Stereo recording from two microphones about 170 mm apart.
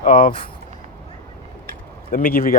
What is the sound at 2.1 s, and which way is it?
Speech, 55° left (ahead or behind).